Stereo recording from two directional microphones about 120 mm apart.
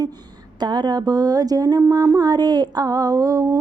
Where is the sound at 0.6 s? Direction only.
35° right (ahead or behind).